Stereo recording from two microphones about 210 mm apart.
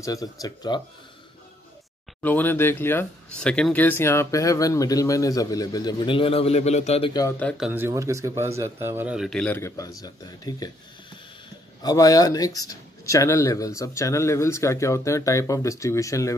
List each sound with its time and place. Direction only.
0.0 s speech: 15° left (ahead or behind)
2.2 s speech: 10° left (ahead or behind); by 7.1 s 30° left (ahead or behind)
7.2 s speech: 10° left (ahead or behind)
11.8 s speech: 15° left (ahead or behind)